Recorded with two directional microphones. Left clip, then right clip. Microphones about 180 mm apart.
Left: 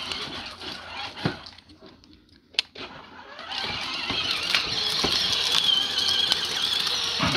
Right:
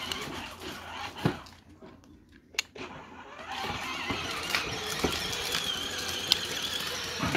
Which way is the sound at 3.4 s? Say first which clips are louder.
Left 5 dB; 35° left (ahead or behind).